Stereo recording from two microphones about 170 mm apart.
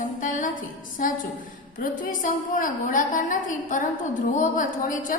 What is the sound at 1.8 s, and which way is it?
A woman's voice, 55° left (ahead or behind).